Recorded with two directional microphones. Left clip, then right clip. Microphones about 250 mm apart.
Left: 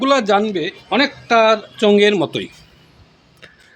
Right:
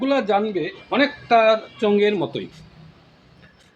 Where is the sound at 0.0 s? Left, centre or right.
Left.